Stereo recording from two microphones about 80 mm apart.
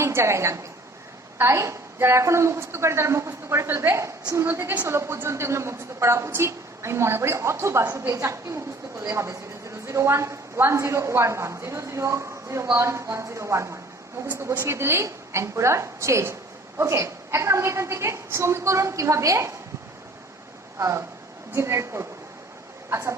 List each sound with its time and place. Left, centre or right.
0.0 s a woman's voice: right
4.9 s a woman's voice: right
20.7 s a woman's voice: right